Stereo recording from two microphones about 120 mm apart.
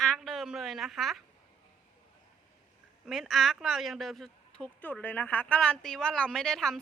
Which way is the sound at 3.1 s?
Centre (ahead or behind).